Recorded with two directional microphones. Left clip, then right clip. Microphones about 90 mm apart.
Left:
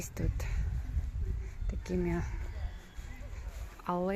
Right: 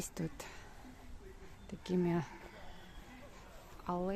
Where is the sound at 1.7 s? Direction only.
10° right (ahead or behind).